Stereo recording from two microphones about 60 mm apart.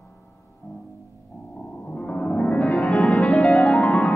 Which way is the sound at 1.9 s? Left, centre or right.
Centre.